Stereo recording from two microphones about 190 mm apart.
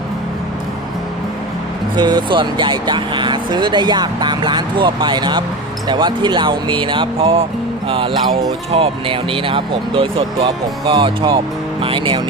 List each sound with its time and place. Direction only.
2.0 s speech: 25° right (ahead or behind)